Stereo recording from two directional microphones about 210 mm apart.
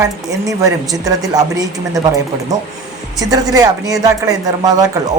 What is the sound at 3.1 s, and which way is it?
Speech, 15° right (ahead or behind).